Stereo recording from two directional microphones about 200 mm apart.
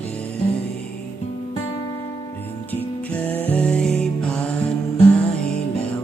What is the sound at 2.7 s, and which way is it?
Music, 10° left (ahead or behind).